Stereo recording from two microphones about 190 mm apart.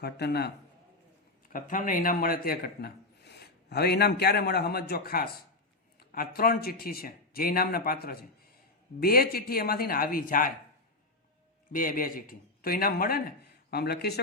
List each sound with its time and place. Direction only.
0.0 s a man's voice: 60° left (ahead or behind)
1.5 s a man's voice: 45° left (ahead or behind)
11.7 s a man's voice: 45° left (ahead or behind)